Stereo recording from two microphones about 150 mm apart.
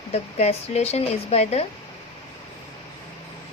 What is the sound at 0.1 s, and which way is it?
A woman's voice, 45° left (ahead or behind).